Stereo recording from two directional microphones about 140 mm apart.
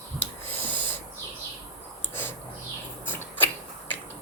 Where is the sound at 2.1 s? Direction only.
15° left (ahead or behind).